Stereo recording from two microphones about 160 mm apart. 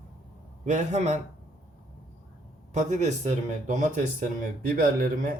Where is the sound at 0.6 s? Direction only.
50° right (ahead or behind).